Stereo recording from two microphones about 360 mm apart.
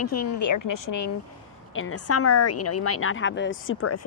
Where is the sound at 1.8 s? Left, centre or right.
Left.